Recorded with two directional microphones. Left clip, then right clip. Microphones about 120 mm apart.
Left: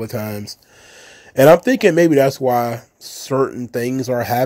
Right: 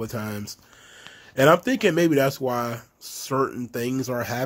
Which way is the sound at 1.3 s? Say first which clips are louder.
Left 8 dB; 40° left (ahead or behind).